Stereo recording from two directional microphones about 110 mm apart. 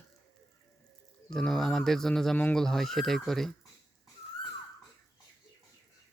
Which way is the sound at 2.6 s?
5° left (ahead or behind).